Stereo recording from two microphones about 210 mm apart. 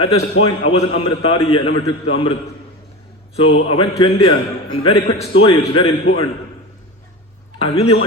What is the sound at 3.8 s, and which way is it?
A man's voice, 25° left (ahead or behind).